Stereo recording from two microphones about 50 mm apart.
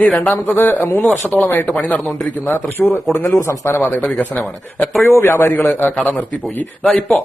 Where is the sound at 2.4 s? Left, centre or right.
Left.